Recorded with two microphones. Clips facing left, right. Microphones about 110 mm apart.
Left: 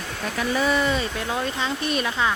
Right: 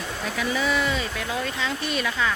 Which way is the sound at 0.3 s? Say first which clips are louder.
Left 3 dB; 45° left (ahead or behind).